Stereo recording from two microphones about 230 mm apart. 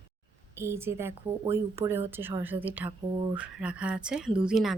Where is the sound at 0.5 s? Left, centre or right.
Centre.